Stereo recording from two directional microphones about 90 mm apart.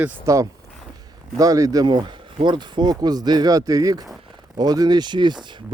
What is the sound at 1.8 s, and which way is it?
Speech, 60° right (ahead or behind).